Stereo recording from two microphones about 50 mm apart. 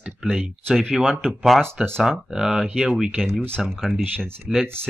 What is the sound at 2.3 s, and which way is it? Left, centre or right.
Speech, centre.